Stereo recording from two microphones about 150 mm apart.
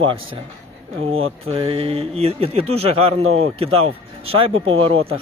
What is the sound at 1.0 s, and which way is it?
Speech, 40° right (ahead or behind).